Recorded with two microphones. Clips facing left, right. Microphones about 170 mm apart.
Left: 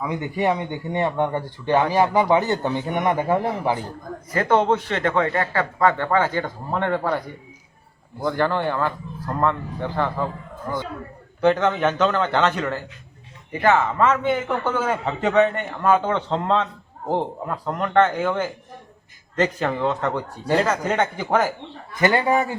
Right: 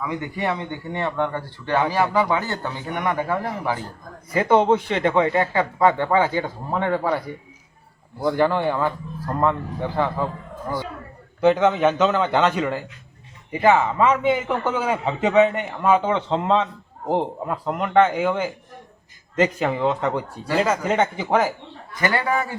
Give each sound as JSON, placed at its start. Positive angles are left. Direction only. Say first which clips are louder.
{"t": 0.0, "sound": "a man's voice", "louder": "left 3 dB", "side_deg": 20}
{"t": 4.3, "sound": "a man's voice", "louder": "right 2 dB", "side_deg": -10}
{"t": 8.2, "sound": "a man's voice", "louder": "right 2 dB", "side_deg": -15}
{"t": 11.3, "sound": "a man's voice", "louder": "right 2 dB", "side_deg": -10}
{"t": 22.0, "sound": "speech", "louder": "left 3 dB", "side_deg": 20}